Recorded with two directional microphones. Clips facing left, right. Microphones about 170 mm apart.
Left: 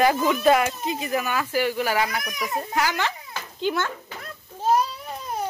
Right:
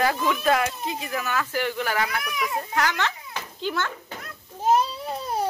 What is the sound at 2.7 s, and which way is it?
A child's voice, 10° left (ahead or behind).